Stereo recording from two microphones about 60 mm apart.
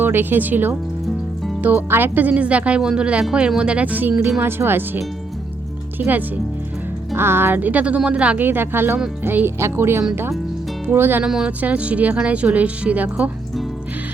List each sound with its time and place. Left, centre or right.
0.0 s speech: right
6.0 s speech: right
7.2 s speech: right
8.4 s speech: right
9.6 s speech: right
11.4 s speech: right